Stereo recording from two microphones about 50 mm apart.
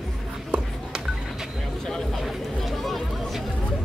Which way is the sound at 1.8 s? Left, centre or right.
Centre.